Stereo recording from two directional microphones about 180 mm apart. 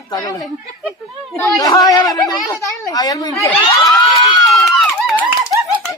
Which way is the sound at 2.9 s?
20° left (ahead or behind).